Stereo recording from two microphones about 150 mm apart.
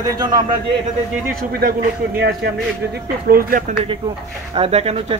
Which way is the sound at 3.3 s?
75° right (ahead or behind).